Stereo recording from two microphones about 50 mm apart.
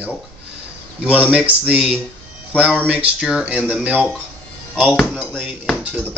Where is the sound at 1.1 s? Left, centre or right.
Right.